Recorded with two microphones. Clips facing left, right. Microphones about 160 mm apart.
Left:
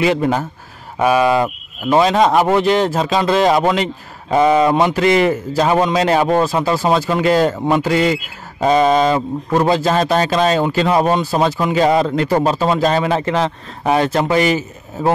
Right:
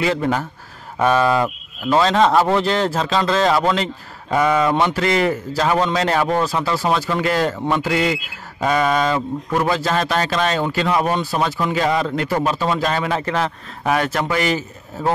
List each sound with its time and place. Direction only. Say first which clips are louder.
0.0 s speech: left 4 dB; 20° left (ahead or behind)